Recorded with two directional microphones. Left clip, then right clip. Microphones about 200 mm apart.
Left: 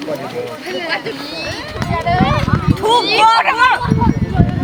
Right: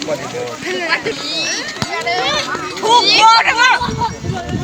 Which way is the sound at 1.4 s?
45° left (ahead or behind).